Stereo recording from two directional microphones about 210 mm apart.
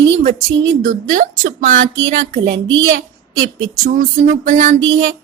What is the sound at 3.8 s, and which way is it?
Speech, 40° right (ahead or behind).